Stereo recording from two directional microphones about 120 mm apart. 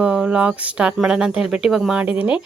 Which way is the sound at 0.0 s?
10° right (ahead or behind).